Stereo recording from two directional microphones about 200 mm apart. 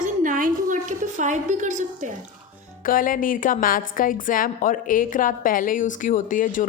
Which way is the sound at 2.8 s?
45° left (ahead or behind).